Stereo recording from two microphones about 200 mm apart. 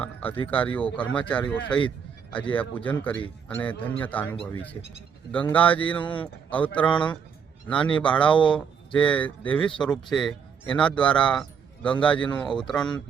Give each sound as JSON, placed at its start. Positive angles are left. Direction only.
{"t": 0.0, "sound": "speech", "side_deg": 10}
{"t": 6.0, "sound": "speech", "side_deg": 25}
{"t": 6.2, "sound": "a man's voice", "side_deg": 5}